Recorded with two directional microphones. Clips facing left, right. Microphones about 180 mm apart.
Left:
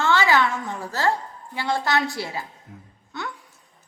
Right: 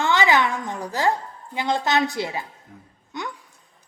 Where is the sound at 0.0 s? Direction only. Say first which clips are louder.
Even; 15° right (ahead or behind).